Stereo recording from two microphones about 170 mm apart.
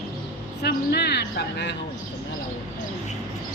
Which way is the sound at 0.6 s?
70° left (ahead or behind).